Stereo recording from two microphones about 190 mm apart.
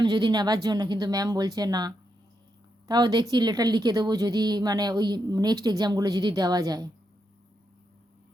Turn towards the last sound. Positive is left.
turn(degrees=-20)  # may be behind; listen again after turning